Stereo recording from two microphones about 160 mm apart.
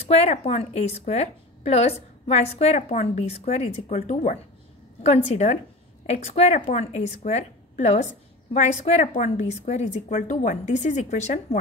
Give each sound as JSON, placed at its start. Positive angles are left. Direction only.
{"t": 0.0, "sound": "a woman's voice", "side_deg": 40}